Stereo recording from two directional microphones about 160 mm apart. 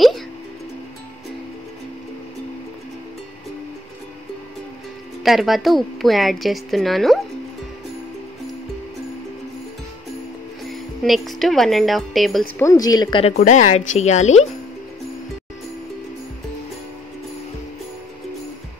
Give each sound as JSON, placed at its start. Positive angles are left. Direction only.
{"t": 5.2, "sound": "a woman's voice", "side_deg": 0}
{"t": 10.7, "sound": "speech", "side_deg": 0}
{"t": 12.5, "sound": "speech", "side_deg": 20}
{"t": 13.2, "sound": "speech", "side_deg": 45}